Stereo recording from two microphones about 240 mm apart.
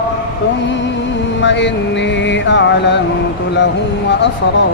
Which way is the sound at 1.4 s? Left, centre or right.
Left.